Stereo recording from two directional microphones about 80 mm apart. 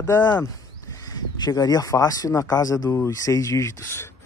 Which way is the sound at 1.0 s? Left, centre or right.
Left.